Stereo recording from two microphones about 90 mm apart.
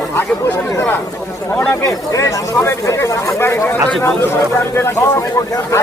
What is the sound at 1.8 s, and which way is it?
Speech, 35° left (ahead or behind).